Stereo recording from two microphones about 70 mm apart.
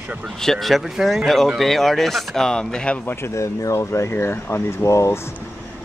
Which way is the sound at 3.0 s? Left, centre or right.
Left.